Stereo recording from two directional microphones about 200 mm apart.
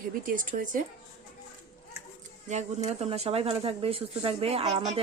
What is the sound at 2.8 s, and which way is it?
Speech, 30° right (ahead or behind).